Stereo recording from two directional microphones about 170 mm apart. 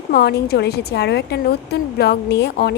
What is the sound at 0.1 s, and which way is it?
Speech, 70° left (ahead or behind).